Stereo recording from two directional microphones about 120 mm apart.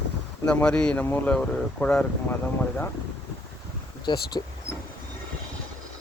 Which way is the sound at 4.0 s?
35° left (ahead or behind).